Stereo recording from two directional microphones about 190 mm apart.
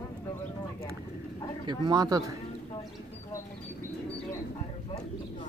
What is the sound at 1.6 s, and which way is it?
Speech, 20° right (ahead or behind).